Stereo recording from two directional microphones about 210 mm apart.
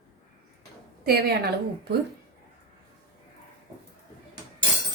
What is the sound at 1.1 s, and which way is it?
Speech, 50° right (ahead or behind).